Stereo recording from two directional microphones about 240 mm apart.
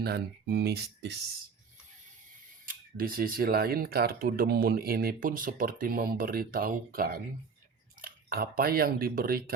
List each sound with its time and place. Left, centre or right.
0.0 s speech: right
2.6 s speech: right